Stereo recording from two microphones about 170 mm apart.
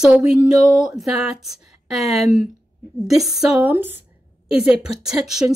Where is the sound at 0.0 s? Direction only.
5° right (ahead or behind).